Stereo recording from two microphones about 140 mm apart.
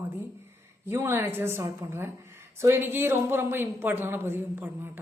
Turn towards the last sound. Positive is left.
turn(degrees=-15)  # may be behind; listen again after turning